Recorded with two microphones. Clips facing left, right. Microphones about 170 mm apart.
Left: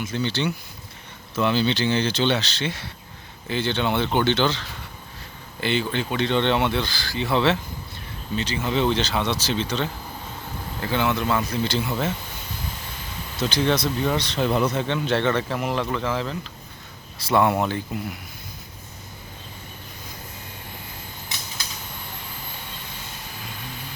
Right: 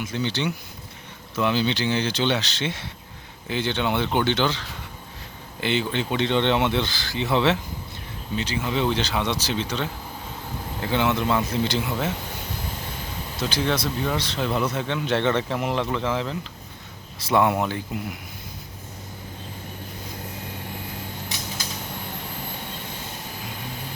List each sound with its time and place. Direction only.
0.0 s speech: 15° right (ahead or behind)
13.3 s speech: 10° right (ahead or behind)
15.0 s speech: 15° right (ahead or behind)
17.4 s speech: 10° right (ahead or behind)